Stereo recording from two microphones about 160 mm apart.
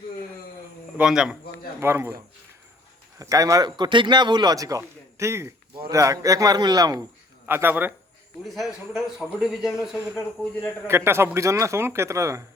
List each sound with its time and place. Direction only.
0.9 s a man's voice: 5° right (ahead or behind)
1.8 s a man's voice: 15° right (ahead or behind)
8.4 s a man's voice: centre (ahead or behind)
10.8 s speech: 15° right (ahead or behind)